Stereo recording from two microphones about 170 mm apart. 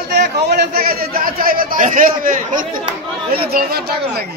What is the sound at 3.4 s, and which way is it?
Speech, 65° right (ahead or behind).